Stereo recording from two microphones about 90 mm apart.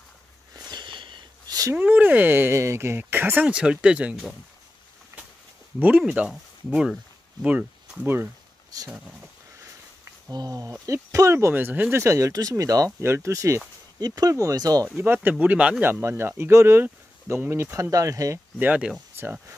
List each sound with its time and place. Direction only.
0.6 s a sound: 55° right (ahead or behind)
1.7 s speech: 20° right (ahead or behind)
3.4 s speech: 10° right (ahead or behind)
5.8 s speech: 20° right (ahead or behind)
8.9 s speech: 10° right (ahead or behind)
10.3 s speech: 45° right (ahead or behind)
11.3 s speech: 25° right (ahead or behind)
12.0 s speech: 35° right (ahead or behind)
13.0 s speech: 30° right (ahead or behind)
13.9 s speech: 45° right (ahead or behind)
15.2 s speech: 15° right (ahead or behind)
15.8 s speech: 25° right (ahead or behind)
18.6 s speech: 15° right (ahead or behind)